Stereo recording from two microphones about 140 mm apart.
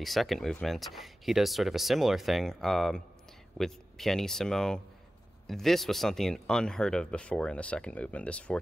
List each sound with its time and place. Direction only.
0.0 s speech: centre (ahead or behind)